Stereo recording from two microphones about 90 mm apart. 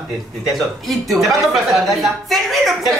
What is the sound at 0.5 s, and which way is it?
Speech, centre (ahead or behind).